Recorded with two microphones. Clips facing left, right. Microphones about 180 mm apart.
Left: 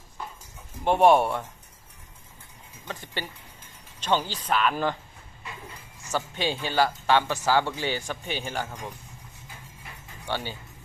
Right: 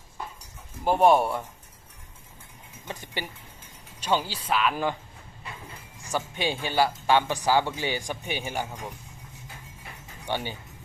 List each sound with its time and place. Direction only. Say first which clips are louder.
0.9 s speech: left 1 dB; centre (ahead or behind)
2.8 s speech: even; 15° right (ahead or behind)
6.0 s speech: even; 15° right (ahead or behind)
10.2 s speech: right 1 dB; 15° right (ahead or behind)